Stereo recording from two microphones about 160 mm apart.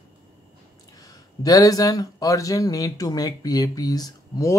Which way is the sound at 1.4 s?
20° left (ahead or behind).